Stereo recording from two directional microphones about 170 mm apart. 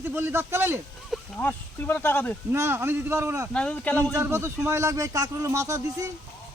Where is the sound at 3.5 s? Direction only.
5° left (ahead or behind).